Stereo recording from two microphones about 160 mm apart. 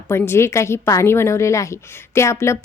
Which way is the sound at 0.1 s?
15° left (ahead or behind).